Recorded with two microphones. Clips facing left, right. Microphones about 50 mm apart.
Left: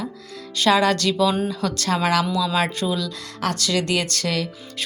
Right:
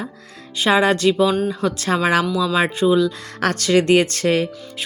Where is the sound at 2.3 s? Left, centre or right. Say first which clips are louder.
Right 3 dB; centre.